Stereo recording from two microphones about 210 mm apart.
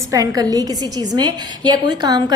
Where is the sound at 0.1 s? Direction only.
15° right (ahead or behind).